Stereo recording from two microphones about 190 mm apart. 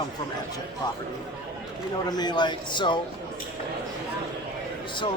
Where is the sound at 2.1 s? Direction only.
20° left (ahead or behind).